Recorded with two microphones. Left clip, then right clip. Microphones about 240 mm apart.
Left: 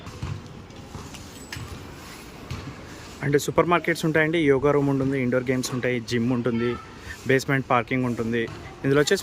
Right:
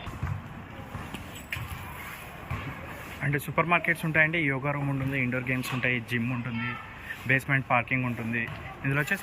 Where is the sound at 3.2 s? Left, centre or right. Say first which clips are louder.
Left 7 dB; centre.